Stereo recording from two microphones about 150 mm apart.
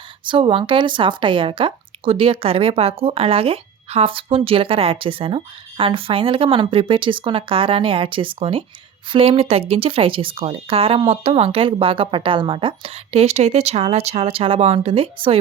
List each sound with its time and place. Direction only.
0.3 s speech: 35° right (ahead or behind)